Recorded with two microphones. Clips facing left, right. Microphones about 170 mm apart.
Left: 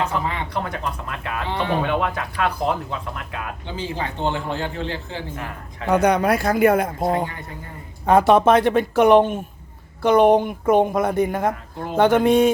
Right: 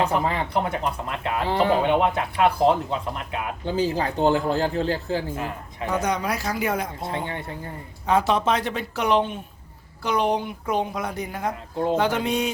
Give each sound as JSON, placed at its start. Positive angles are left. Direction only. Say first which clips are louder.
{"t": 0.0, "sound": "a man's voice", "louder": "right 2 dB", "side_deg": -35}
{"t": 1.5, "sound": "a man's voice", "louder": "right 4 dB", "side_deg": -35}
{"t": 1.8, "sound": "speech", "louder": "right 2 dB", "side_deg": -25}
{"t": 3.8, "sound": "a man's voice", "louder": "right 5 dB", "side_deg": -40}
{"t": 5.9, "sound": "speech", "louder": "left 8 dB", "side_deg": 65}